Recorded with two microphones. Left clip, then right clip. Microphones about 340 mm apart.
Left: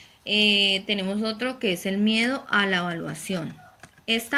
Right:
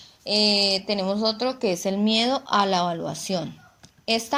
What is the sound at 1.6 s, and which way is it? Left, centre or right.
Speech, right.